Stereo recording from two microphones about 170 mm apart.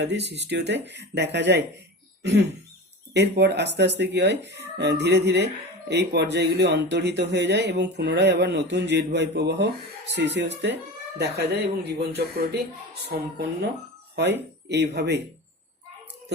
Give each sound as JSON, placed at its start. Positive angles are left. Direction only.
{"t": 0.0, "sound": "speech", "side_deg": -90}
{"t": 11.2, "sound": "speech", "side_deg": -75}
{"t": 13.1, "sound": "speech", "side_deg": -70}
{"t": 14.7, "sound": "speech", "side_deg": -80}